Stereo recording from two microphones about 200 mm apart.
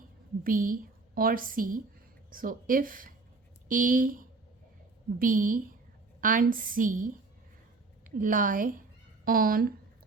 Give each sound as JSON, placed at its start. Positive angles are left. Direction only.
{"t": 0.4, "sound": "a woman's voice", "side_deg": -45}